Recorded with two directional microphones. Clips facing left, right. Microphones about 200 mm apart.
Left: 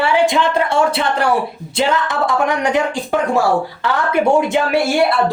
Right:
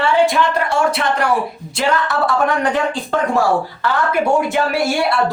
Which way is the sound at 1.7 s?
20° left (ahead or behind).